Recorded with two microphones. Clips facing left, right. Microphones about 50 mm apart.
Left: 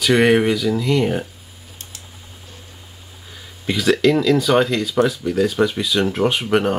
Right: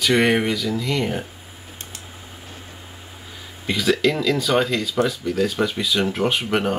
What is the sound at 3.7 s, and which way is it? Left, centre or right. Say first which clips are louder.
Speech: left 4 dB; centre.